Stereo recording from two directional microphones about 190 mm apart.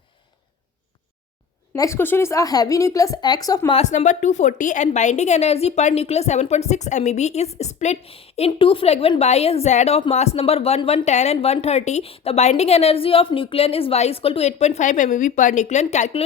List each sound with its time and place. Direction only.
1.7 s speech: 15° left (ahead or behind)
3.8 s a woman's voice: 40° left (ahead or behind)